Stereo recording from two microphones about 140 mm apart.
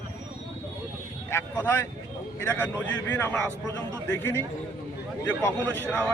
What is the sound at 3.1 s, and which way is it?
Speech, 15° left (ahead or behind).